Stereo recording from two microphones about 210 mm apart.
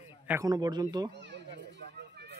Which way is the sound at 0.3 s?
15° right (ahead or behind).